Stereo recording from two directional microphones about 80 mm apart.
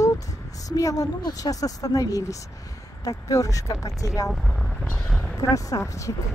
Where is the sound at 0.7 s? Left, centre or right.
Left.